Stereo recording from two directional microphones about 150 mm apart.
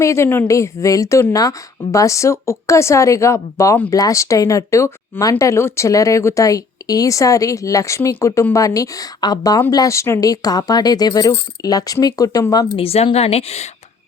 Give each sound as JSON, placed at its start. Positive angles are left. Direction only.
{"t": 0.0, "sound": "a woman's voice", "side_deg": 20}
{"t": 12.7, "sound": "a woman's voice", "side_deg": 40}